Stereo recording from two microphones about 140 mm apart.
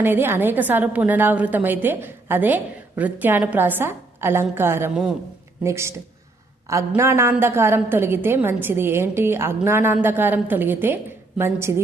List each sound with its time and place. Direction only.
0.0 s a woman's voice: 15° right (ahead or behind)